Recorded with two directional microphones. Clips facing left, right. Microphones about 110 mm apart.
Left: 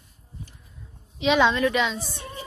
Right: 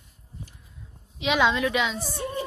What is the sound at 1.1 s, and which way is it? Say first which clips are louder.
A woman's voice: left 3 dB; 5° right (ahead or behind).